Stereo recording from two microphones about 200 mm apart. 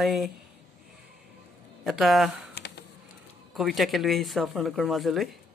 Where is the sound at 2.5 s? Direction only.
55° left (ahead or behind).